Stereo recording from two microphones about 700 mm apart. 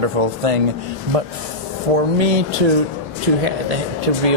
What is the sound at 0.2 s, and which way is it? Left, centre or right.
Speech, right.